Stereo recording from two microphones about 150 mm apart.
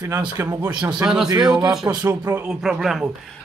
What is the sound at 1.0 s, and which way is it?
Speech, 5° right (ahead or behind).